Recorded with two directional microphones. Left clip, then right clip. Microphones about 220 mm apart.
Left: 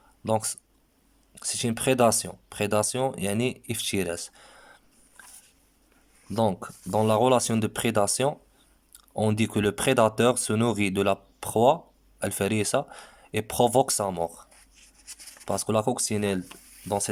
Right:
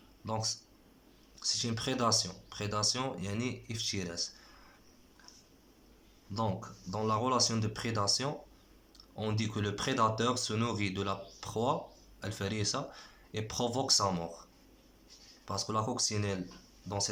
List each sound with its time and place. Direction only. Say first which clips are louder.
0.3 s speech: left 9 dB; 50° left (ahead or behind)
6.3 s speech: left 10 dB; 45° left (ahead or behind)
15.4 s speech: left 9 dB; 45° left (ahead or behind)